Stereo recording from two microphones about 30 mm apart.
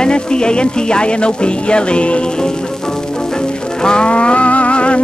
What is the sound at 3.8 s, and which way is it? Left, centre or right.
Music, left.